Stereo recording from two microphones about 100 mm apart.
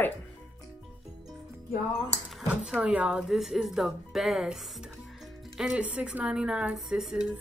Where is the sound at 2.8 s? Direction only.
10° right (ahead or behind).